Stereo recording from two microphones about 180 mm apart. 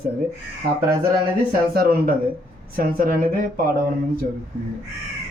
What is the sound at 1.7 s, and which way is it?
Speech, 55° right (ahead or behind).